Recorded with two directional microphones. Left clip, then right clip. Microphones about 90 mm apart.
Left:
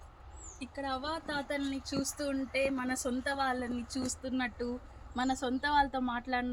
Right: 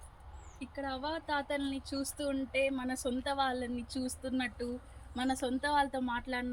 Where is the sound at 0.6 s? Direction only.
35° left (ahead or behind).